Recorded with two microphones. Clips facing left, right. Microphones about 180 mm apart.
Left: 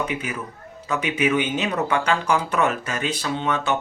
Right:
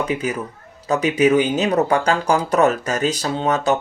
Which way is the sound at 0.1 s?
35° right (ahead or behind).